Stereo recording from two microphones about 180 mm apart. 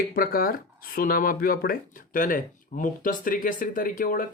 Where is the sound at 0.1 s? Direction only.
55° left (ahead or behind).